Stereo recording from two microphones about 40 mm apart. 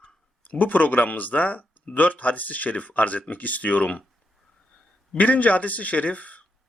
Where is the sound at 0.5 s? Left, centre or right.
Left.